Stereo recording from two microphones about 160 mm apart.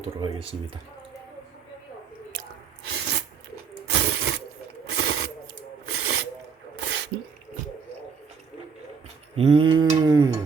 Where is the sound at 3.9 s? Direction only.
90° right.